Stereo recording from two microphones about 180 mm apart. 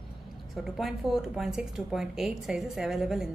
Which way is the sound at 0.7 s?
Centre (ahead or behind).